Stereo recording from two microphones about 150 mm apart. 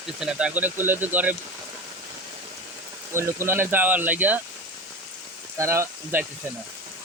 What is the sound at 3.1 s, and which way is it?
Speech, 15° right (ahead or behind).